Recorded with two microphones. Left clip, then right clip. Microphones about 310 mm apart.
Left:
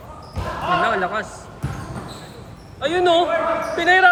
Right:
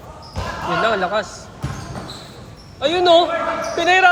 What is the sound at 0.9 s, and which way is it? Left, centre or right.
Speech, centre.